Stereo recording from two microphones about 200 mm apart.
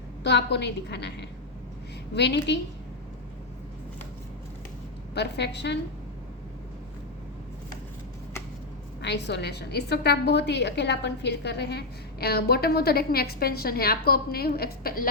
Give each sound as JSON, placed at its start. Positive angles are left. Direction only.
{"t": 0.2, "sound": "a woman's voice", "side_deg": 60}
{"t": 5.1, "sound": "a woman's voice", "side_deg": 60}
{"t": 9.0, "sound": "a woman's voice", "side_deg": 60}